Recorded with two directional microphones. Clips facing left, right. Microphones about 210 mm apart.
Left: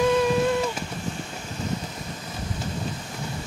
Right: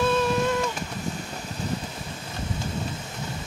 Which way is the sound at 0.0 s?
10° left (ahead or behind).